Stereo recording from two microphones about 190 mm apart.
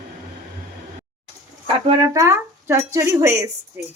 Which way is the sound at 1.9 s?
15° right (ahead or behind).